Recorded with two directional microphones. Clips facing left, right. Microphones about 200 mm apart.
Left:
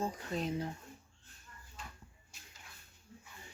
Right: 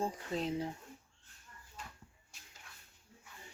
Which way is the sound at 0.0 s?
25° right (ahead or behind).